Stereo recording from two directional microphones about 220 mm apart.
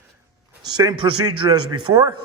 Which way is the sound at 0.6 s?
20° right (ahead or behind).